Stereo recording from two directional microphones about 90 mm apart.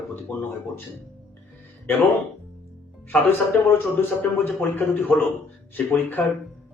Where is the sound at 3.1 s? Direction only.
15° left (ahead or behind).